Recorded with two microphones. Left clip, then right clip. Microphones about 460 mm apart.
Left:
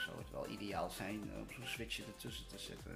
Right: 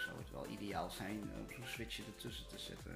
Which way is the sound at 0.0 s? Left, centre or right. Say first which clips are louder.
Left 1 dB; centre.